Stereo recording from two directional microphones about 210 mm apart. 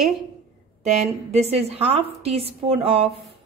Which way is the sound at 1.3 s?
30° right (ahead or behind).